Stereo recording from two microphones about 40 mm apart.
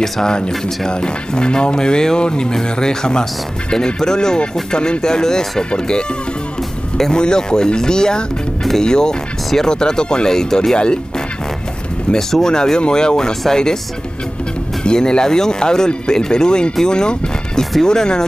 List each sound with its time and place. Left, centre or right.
0.0 s speech: centre
12.1 s speech: centre
14.8 s speech: centre